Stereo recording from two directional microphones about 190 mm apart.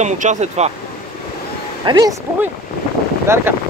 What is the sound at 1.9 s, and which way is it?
Speech, 20° right (ahead or behind).